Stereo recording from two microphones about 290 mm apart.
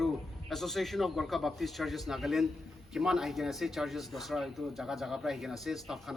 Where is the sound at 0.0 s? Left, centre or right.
Centre.